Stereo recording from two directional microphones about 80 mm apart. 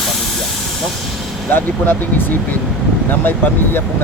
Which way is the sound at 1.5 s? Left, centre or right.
Left.